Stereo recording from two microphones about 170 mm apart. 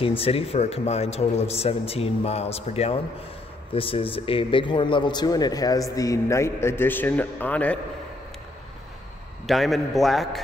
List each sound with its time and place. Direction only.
0.2 s a man's voice: 35° left (ahead or behind); by 7.8 s 10° left (ahead or behind)
9.5 s a man's voice: centre (ahead or behind)